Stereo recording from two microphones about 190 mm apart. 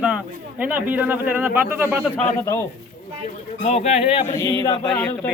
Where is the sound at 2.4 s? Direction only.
15° left (ahead or behind).